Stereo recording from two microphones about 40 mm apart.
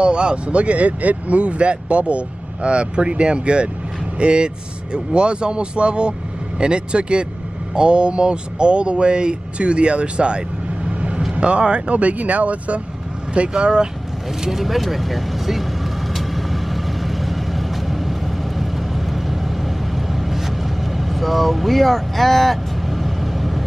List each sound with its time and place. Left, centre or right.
0.0 s speech: right
14.6 s vehicle: centre